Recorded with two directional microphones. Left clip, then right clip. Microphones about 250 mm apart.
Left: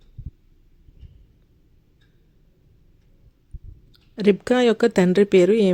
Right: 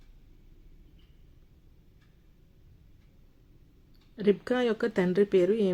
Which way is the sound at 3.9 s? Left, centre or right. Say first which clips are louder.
Left 7 dB; left.